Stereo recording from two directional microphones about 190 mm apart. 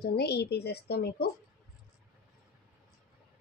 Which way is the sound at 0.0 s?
55° left (ahead or behind).